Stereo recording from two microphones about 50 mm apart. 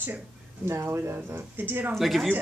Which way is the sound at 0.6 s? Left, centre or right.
Right.